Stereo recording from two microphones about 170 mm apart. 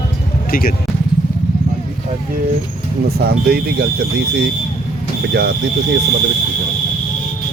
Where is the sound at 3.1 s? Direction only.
65° right (ahead or behind).